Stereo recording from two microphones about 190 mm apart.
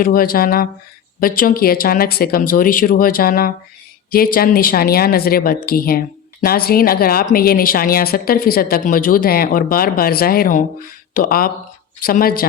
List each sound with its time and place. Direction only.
0.0 s a woman's voice: 50° left (ahead or behind)